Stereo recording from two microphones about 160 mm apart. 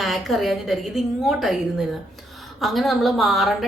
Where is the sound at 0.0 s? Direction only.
Centre (ahead or behind).